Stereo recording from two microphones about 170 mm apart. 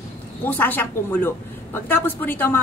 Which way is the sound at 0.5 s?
10° left (ahead or behind).